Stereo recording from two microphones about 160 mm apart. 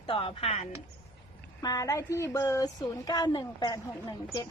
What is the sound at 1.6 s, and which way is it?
Speech, 20° left (ahead or behind).